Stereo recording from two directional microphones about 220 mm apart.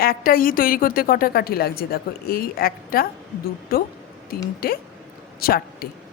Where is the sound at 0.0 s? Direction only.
40° left (ahead or behind).